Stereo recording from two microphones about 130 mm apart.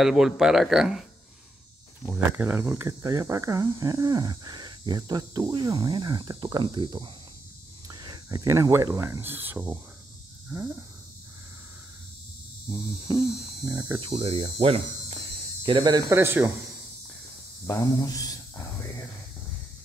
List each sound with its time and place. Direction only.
0.0 s speech: 5° right (ahead or behind)
2.3 s speech: 20° right (ahead or behind)
10.5 s a sound: 20° right (ahead or behind)
13.2 s mains hum: 5° right (ahead or behind)
13.9 s speech: 45° right (ahead or behind)
15.6 s speech: 35° right (ahead or behind)
16.1 s speech: 20° right (ahead or behind)
17.6 s speech: 25° left (ahead or behind)